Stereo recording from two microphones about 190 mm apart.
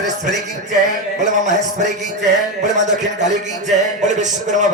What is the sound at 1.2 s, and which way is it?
Music, 40° right (ahead or behind).